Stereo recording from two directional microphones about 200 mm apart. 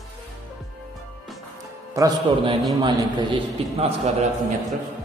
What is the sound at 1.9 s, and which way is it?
A man's voice, 20° right (ahead or behind).